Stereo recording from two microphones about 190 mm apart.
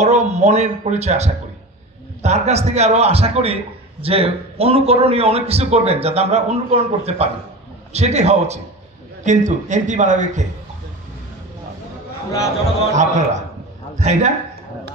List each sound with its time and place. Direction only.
0.0 s a man's voice: 35° right (ahead or behind)
12.9 s a man's voice: 40° right (ahead or behind)